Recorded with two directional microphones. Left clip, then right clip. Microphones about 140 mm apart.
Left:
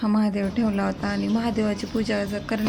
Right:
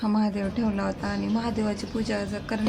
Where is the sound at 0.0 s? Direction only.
15° left (ahead or behind).